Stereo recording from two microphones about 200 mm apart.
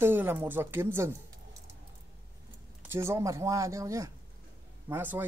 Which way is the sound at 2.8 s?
10° right (ahead or behind).